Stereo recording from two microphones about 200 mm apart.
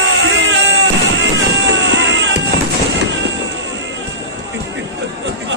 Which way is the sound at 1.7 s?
65° right (ahead or behind).